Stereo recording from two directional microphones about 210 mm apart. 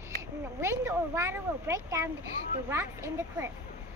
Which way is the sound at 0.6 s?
15° right (ahead or behind).